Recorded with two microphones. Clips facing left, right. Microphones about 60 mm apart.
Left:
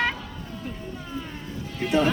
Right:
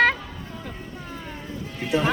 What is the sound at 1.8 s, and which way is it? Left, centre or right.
Music, centre.